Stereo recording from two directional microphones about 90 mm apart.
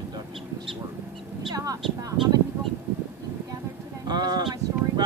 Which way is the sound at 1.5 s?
45° right (ahead or behind).